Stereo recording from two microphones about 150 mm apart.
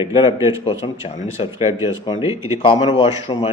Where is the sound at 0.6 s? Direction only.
35° left (ahead or behind).